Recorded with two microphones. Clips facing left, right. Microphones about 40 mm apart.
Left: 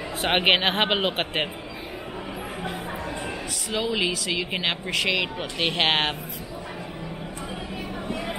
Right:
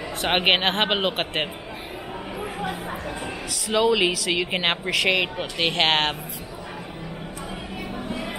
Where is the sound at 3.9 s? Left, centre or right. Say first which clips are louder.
Right 4 dB; right.